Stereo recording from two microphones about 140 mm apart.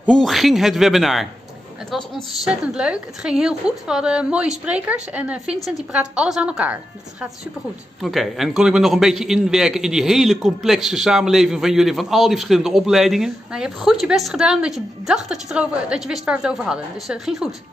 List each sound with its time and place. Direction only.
0.0 s a man's voice: 5° left (ahead or behind)